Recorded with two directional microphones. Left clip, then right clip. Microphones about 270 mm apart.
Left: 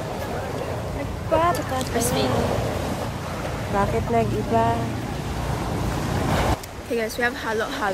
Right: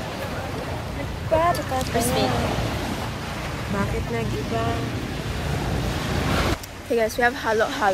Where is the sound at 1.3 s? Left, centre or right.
Centre.